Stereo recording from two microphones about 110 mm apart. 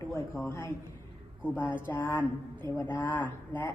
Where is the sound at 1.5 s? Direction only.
20° left (ahead or behind).